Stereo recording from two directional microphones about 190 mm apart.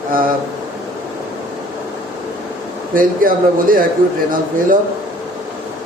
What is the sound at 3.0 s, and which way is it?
Speech, 45° right (ahead or behind).